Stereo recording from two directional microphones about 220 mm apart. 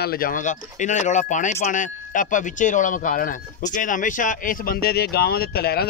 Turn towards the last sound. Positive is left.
turn(degrees=45)  # may be behind; listen again after turning